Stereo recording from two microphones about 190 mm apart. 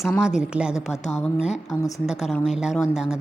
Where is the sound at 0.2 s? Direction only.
5° right (ahead or behind).